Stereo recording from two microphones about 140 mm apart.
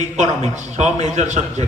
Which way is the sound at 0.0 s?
55° right (ahead or behind).